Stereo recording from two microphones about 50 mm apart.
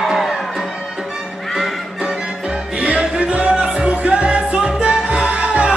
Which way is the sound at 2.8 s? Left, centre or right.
Right.